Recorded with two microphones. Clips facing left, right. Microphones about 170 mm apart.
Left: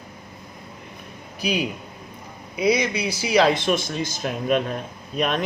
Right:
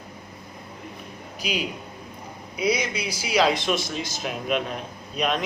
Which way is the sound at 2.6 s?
60° left (ahead or behind).